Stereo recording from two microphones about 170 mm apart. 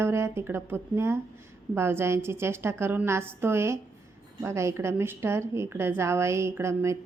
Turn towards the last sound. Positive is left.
turn(degrees=-15)  # may be behind; listen again after turning